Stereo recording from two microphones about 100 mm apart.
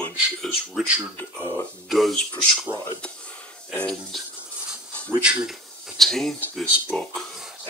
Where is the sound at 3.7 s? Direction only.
5° left (ahead or behind).